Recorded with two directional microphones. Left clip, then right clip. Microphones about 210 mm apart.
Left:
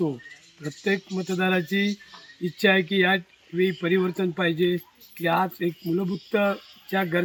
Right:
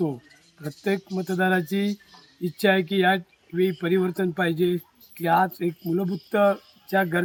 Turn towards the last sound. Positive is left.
turn(degrees=-15)  # may be behind; listen again after turning